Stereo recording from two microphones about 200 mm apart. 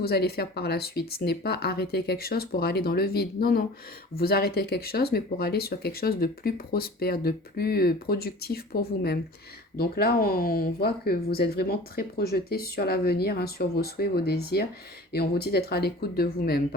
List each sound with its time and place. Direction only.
0.0 s speech: 50° left (ahead or behind)